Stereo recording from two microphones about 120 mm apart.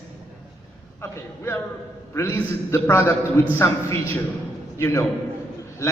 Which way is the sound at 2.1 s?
25° left (ahead or behind).